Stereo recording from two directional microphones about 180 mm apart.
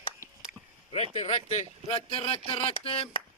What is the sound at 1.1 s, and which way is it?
A man's voice, 40° left (ahead or behind).